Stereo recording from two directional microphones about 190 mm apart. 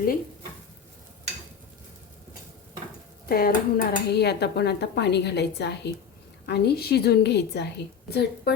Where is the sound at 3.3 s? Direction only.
50° left (ahead or behind).